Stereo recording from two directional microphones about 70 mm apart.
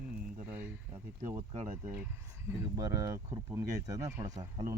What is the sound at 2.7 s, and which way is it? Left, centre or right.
Speech, right.